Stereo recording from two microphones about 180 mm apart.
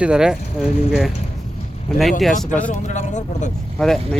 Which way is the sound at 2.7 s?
40° left (ahead or behind).